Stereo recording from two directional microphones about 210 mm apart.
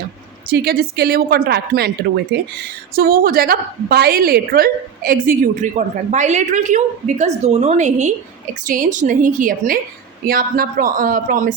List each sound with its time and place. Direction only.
0.5 s a woman's voice: 45° right (ahead or behind)